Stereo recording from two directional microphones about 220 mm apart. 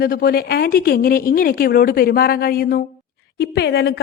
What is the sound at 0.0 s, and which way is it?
A woman's voice, 40° left (ahead or behind).